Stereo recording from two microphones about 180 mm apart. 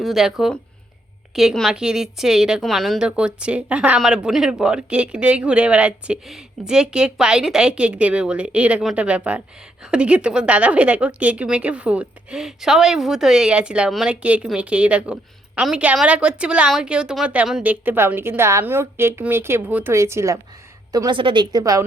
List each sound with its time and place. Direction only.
0.0 s a woman's voice: centre (ahead or behind); by 21.8 s 20° right (ahead or behind)